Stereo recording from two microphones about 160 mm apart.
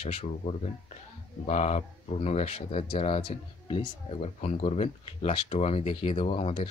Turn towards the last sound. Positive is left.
turn(degrees=40)  # may be behind; listen again after turning